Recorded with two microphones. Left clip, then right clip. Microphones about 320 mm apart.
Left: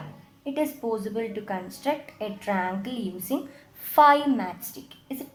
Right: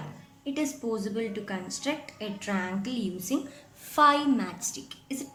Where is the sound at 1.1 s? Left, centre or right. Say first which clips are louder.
Left 3 dB; left.